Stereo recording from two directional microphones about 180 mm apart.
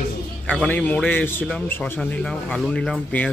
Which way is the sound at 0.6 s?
10° left (ahead or behind).